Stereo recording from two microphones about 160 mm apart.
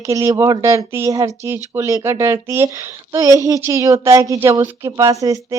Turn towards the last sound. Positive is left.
turn(degrees=-20)  # may be behind; listen again after turning